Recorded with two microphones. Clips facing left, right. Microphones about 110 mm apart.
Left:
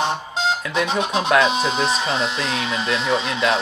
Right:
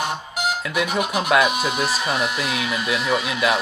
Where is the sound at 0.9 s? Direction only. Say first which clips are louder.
Left 1 dB; 25° left (ahead or behind).